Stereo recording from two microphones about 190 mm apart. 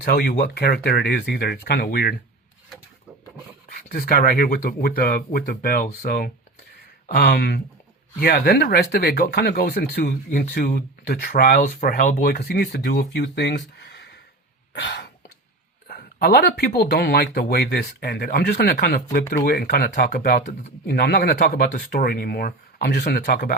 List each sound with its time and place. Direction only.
0.0 s speech: 55° left (ahead or behind)
3.7 s speech: 50° left (ahead or behind); by 14.2 s 65° left (ahead or behind)
14.7 s a sound: 70° left (ahead or behind)
15.9 s speech: 50° left (ahead or behind)